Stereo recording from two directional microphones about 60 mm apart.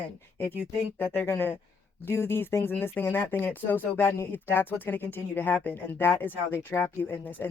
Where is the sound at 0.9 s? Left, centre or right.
Left.